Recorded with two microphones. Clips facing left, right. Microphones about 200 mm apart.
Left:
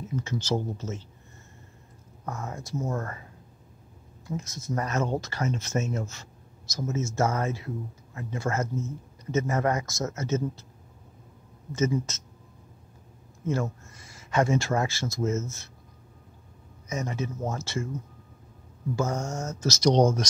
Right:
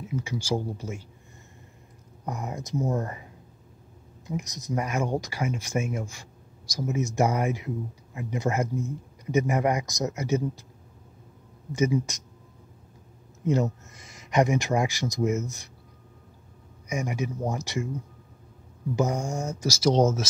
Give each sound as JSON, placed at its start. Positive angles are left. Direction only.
{"t": 0.0, "sound": "speech", "side_deg": -10}
{"t": 2.2, "sound": "speech", "side_deg": -15}
{"t": 4.3, "sound": "speech", "side_deg": -15}
{"t": 11.7, "sound": "speech", "side_deg": -15}
{"t": 13.4, "sound": "speech", "side_deg": -20}
{"t": 16.8, "sound": "speech", "side_deg": -15}
{"t": 18.9, "sound": "speech", "side_deg": -15}